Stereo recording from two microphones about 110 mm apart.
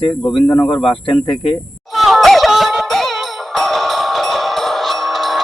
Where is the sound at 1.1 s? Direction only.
55° left (ahead or behind).